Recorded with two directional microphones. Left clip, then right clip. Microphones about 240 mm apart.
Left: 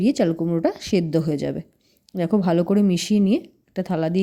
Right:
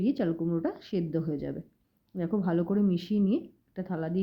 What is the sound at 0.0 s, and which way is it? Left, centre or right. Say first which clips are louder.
Speech: left 9 dB; left.